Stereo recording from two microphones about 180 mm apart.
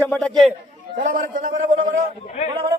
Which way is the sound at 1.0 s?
45° right (ahead or behind).